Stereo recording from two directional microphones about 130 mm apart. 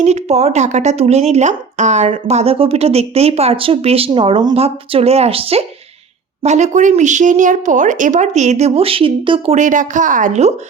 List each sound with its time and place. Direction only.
0.0 s speech: 55° right (ahead or behind)
6.4 s speech: 65° right (ahead or behind); by 9.6 s 40° right (ahead or behind)
9.6 s speech: 75° right (ahead or behind)